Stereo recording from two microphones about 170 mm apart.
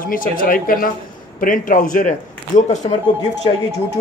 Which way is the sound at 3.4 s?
30° left (ahead or behind).